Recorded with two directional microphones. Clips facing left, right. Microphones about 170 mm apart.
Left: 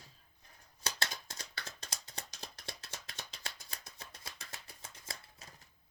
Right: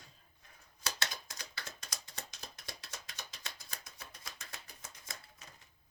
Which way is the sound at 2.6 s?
30° left (ahead or behind).